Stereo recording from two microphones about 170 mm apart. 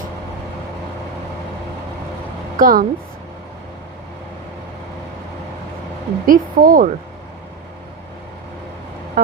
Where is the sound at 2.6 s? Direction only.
55° right (ahead or behind).